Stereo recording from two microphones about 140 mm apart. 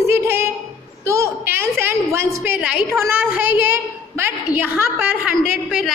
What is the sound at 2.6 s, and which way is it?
A woman's voice, 10° right (ahead or behind).